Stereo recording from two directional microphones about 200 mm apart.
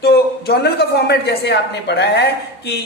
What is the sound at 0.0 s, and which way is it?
Speech, 55° left (ahead or behind).